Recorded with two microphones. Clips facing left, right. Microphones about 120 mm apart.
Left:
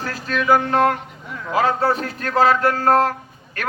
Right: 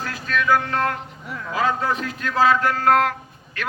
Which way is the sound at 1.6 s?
35° left (ahead or behind).